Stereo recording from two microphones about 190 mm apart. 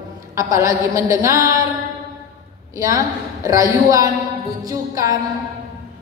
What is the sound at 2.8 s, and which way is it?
A woman's voice, 15° right (ahead or behind).